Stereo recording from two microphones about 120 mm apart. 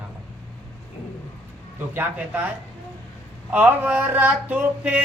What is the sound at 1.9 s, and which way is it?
Male singing, 20° right (ahead or behind).